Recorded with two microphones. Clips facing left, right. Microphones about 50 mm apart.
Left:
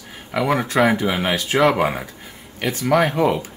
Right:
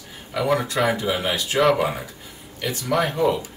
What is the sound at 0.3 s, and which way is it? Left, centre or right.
Speech, left.